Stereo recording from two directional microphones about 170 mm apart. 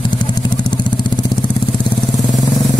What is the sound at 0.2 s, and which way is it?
Vehicle, 25° left (ahead or behind).